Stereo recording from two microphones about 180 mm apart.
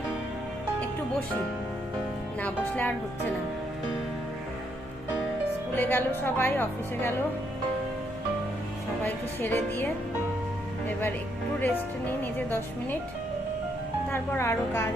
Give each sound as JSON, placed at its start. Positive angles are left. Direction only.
{"t": 2.4, "sound": "a woman's voice", "side_deg": 10}
{"t": 5.7, "sound": "a woman's voice", "side_deg": 10}
{"t": 9.0, "sound": "a woman's voice", "side_deg": 10}
{"t": 11.6, "sound": "a woman's voice", "side_deg": 10}
{"t": 14.1, "sound": "a woman's voice", "side_deg": 15}